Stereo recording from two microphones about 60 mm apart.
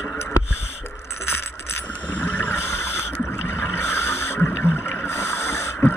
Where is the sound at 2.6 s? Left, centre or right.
Left.